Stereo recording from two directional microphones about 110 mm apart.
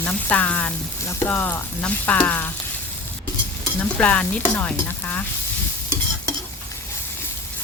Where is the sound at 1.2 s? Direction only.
20° left (ahead or behind).